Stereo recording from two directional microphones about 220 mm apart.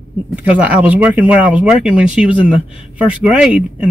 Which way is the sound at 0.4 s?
5° right (ahead or behind).